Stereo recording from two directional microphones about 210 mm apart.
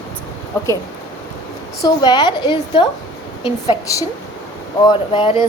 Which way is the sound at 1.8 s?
20° left (ahead or behind).